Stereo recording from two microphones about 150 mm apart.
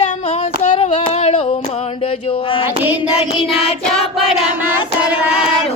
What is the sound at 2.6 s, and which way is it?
Child singing, 10° right (ahead or behind).